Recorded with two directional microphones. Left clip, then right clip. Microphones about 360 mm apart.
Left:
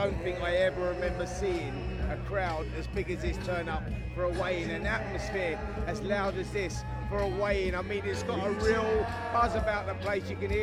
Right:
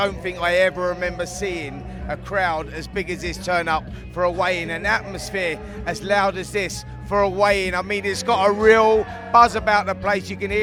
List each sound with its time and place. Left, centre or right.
0.0 s a man's voice: right